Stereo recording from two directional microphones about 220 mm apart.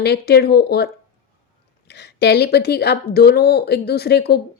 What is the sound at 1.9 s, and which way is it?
Speech, 50° left (ahead or behind).